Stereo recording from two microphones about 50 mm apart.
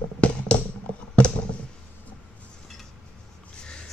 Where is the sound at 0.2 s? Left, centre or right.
Left.